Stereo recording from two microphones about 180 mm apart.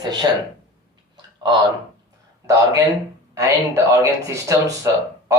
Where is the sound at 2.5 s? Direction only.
20° right (ahead or behind).